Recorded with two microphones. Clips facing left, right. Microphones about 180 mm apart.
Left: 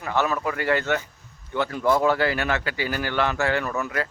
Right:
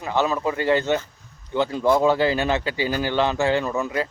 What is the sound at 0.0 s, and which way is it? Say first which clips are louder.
Speech: right 2 dB; 20° right (ahead or behind).